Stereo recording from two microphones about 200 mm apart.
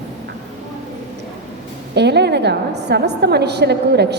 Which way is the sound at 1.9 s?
55° right (ahead or behind).